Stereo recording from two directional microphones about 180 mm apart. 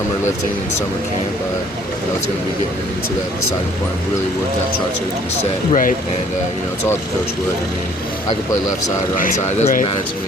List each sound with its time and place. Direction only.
5.4 s speech: 45° left (ahead or behind)
9.1 s speech: 45° left (ahead or behind)